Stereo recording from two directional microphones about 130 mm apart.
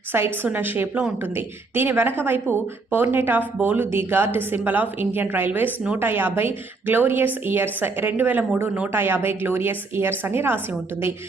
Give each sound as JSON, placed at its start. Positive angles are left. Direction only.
{"t": 0.4, "sound": "speech", "side_deg": -15}